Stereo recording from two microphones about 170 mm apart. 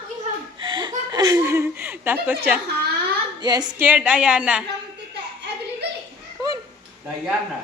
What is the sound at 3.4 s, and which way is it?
Female singing, 25° right (ahead or behind).